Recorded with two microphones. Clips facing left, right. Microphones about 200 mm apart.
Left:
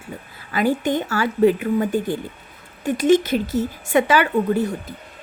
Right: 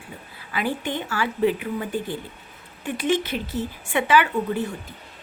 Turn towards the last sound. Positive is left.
turn(degrees=40)  # may be behind; listen again after turning